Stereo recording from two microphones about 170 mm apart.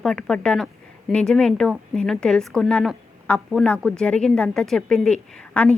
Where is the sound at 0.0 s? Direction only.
5° left (ahead or behind).